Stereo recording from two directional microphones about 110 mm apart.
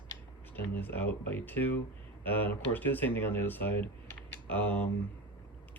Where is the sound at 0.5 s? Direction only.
15° left (ahead or behind).